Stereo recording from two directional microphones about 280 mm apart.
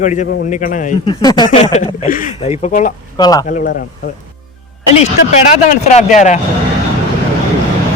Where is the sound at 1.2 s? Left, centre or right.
Centre.